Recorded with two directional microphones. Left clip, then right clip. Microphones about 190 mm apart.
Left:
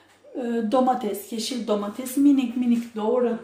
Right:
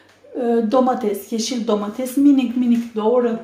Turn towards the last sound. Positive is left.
turn(degrees=-10)  # may be behind; listen again after turning